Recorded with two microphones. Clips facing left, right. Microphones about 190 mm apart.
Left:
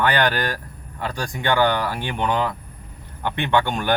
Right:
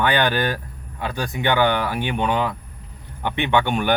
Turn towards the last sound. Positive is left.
turn(degrees=-10)  # may be behind; listen again after turning